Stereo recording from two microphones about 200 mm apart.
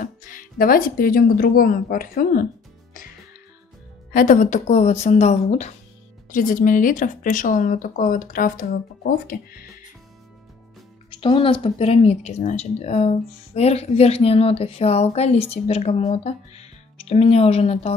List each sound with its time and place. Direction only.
0.0 s speech: 40° left (ahead or behind)
4.1 s speech: 45° left (ahead or behind)
11.1 s speech: 25° left (ahead or behind)